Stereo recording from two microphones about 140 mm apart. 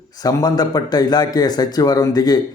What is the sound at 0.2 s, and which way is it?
Speech, 25° left (ahead or behind).